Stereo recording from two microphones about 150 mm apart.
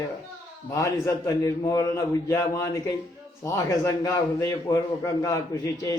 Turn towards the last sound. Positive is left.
turn(degrees=25)  # may be behind; listen again after turning